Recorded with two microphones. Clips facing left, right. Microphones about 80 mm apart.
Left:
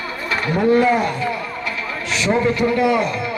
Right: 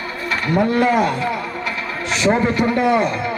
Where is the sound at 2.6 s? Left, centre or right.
Right.